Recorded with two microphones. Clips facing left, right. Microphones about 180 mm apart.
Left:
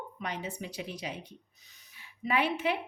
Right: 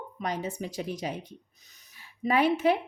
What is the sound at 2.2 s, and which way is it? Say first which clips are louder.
Speech: right 6 dB; 40° right (ahead or behind).